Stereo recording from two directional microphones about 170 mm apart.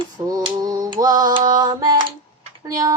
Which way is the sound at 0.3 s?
20° right (ahead or behind).